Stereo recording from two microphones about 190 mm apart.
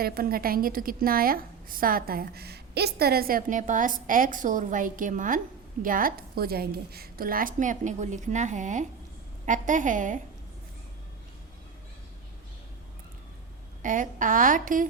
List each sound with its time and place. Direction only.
0.0 s a woman's voice: 50° right (ahead or behind)
13.8 s a woman's voice: 45° right (ahead or behind)